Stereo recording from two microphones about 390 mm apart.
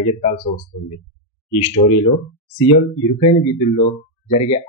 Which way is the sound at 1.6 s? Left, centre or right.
Centre.